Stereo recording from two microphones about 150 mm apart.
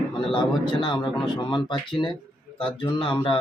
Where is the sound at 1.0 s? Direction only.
Centre (ahead or behind).